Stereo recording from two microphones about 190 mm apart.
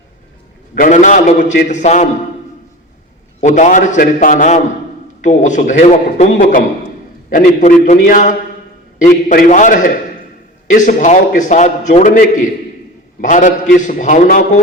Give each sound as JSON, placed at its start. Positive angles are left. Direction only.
{"t": 0.8, "sound": "a man's voice", "side_deg": 40}
{"t": 3.4, "sound": "a man's voice", "side_deg": 40}